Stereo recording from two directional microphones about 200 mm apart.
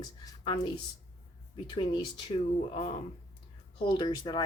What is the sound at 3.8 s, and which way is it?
Speech, 20° left (ahead or behind).